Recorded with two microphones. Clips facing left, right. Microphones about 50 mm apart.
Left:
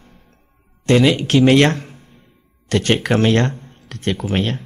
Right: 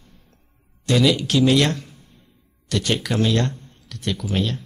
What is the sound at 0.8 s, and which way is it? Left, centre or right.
Speech, left.